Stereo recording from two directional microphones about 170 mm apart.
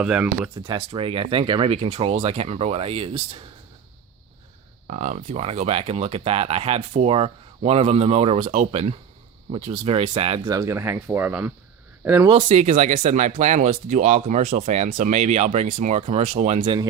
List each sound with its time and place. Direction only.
0.0 s speech: 5° right (ahead or behind)
0.7 s speech: 30° right (ahead or behind)
4.9 s speech: 45° right (ahead or behind)
10.5 s speech: 20° right (ahead or behind)
12.4 s speech: 45° right (ahead or behind)